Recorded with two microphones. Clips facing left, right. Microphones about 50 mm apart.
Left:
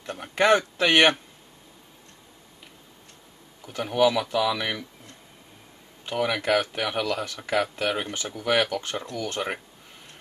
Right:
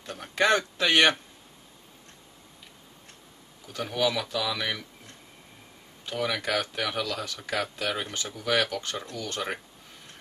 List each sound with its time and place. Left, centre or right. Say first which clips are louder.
0.0 s a sound: left 3 dB; centre
3.6 s speech: left 6 dB; centre
6.0 s speech: left 4 dB; left